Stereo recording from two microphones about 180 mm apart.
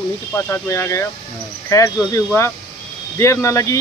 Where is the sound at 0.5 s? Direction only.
15° left (ahead or behind).